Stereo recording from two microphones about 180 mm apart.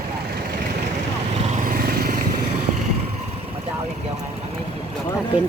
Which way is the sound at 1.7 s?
55° right (ahead or behind).